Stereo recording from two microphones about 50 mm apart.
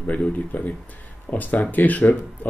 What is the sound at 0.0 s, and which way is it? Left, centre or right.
Speech, left.